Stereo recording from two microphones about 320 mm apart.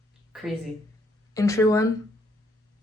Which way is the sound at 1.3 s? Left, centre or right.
Centre.